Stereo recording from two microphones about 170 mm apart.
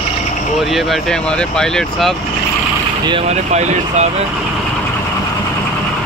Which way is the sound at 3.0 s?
35° right (ahead or behind).